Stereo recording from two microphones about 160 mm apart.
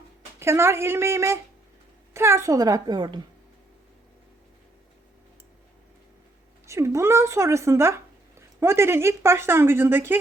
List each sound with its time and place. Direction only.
0.3 s a woman's voice: 15° right (ahead or behind)
6.7 s speech: 20° right (ahead or behind)